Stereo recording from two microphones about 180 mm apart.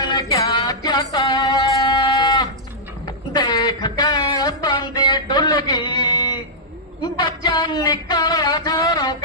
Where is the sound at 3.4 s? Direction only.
25° left (ahead or behind).